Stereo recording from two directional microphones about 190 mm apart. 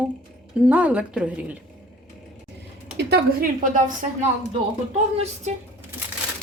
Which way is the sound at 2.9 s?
60° right (ahead or behind).